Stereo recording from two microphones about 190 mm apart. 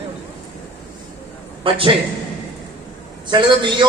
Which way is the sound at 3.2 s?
25° right (ahead or behind).